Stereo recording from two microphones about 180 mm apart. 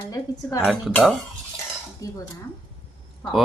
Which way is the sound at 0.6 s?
Centre (ahead or behind).